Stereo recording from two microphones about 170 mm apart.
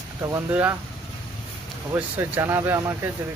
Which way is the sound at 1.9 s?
15° right (ahead or behind).